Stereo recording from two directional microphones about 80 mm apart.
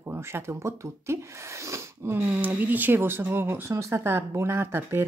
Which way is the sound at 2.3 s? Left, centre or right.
Right.